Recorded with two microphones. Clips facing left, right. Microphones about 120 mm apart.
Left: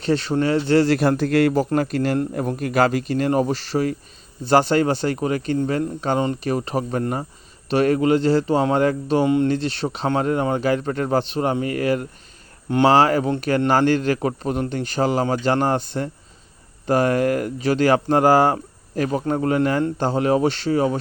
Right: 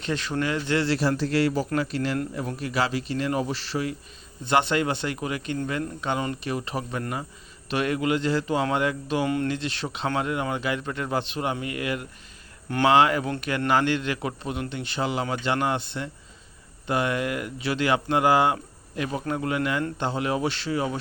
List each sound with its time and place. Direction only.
0.0 s a man's voice: 35° left (ahead or behind)
0.9 s a man's voice: 55° left (ahead or behind); by 9.2 s 35° left (ahead or behind)
9.2 s speech: 20° left (ahead or behind)
9.5 s a man's voice: 35° left (ahead or behind)